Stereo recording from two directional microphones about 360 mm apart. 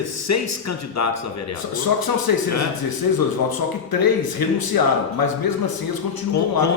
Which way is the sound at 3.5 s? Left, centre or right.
Left.